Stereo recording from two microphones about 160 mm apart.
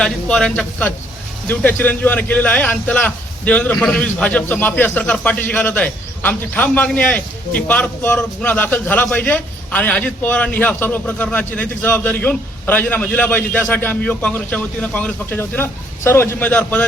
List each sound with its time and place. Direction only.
0.0 s a man's voice: 5° left (ahead or behind)